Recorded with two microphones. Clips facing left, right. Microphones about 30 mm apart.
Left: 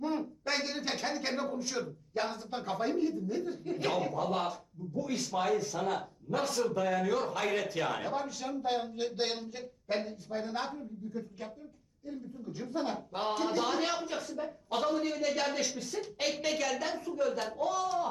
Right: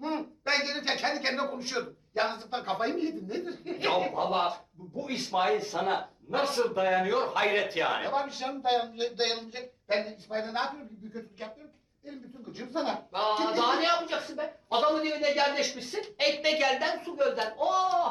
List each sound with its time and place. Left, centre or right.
0.0 s a man's voice: right